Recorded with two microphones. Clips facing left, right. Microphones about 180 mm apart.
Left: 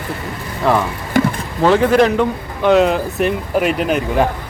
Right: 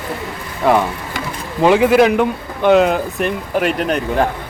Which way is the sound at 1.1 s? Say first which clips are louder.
Left 14 dB; 50° left (ahead or behind).